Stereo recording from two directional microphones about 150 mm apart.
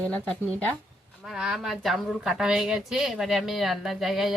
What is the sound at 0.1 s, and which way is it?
Speech, 5° left (ahead or behind).